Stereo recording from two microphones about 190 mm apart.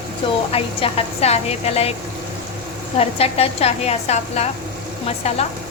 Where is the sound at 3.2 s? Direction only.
30° left (ahead or behind).